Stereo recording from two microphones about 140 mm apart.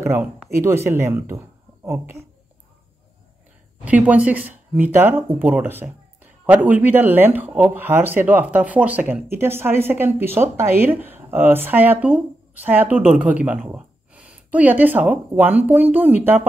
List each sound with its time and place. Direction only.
0.0 s speech: 20° right (ahead or behind)
3.8 s speech: 10° right (ahead or behind)